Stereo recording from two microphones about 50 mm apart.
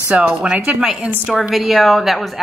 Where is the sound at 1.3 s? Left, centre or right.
Centre.